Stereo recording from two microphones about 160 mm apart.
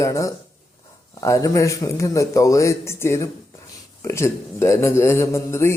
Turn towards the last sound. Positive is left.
turn(degrees=15)  # may be behind; listen again after turning